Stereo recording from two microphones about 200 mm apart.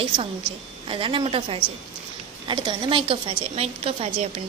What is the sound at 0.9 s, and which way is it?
A woman's voice, 25° right (ahead or behind).